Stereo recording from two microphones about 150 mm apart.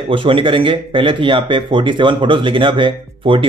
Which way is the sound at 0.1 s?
35° right (ahead or behind).